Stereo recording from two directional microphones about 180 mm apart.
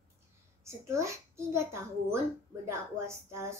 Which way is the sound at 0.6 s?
15° right (ahead or behind).